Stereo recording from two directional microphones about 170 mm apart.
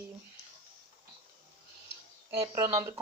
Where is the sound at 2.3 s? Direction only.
20° right (ahead or behind).